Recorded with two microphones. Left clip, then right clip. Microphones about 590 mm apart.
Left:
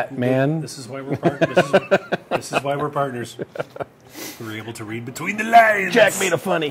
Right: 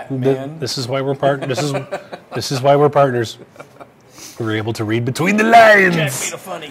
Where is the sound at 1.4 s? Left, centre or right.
Left.